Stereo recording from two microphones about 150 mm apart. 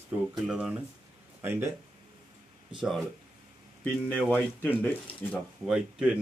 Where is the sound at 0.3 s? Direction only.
5° right (ahead or behind).